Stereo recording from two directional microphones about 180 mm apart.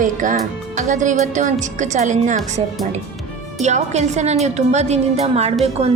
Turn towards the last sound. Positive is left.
turn(degrees=-35)  # may be behind; listen again after turning